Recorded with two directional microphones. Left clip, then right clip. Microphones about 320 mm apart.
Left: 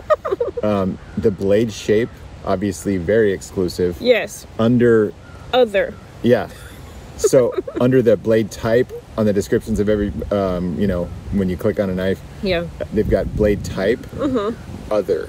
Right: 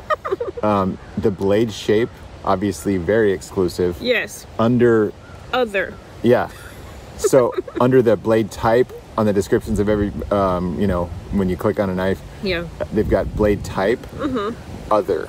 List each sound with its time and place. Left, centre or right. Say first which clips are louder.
0.1 s a sound: left 4 dB; centre
0.6 s speech: right 1 dB; centre
4.0 s speech: left 6 dB; centre
4.6 s speech: left 1 dB; centre
5.5 s speech: left 4 dB; centre
6.2 s speech: even; centre
12.4 s speech: left 3 dB; centre
12.7 s speech: even; centre
14.2 s speech: left 4 dB; centre
14.9 s speech: right 1 dB; centre